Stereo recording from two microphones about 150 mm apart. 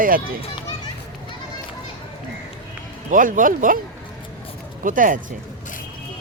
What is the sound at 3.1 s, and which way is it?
Speech, 65° right (ahead or behind).